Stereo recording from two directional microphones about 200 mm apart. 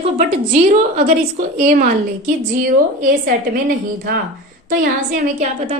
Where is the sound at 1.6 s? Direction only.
40° right (ahead or behind).